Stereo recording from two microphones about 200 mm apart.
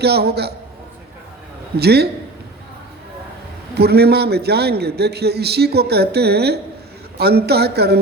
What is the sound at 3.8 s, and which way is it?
A man's voice, 55° right (ahead or behind).